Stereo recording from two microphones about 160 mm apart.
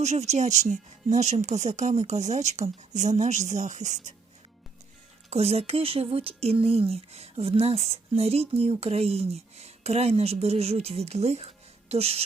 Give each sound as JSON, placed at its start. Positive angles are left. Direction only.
{"t": 0.0, "sound": "speech", "side_deg": -45}
{"t": 5.3, "sound": "speech", "side_deg": -40}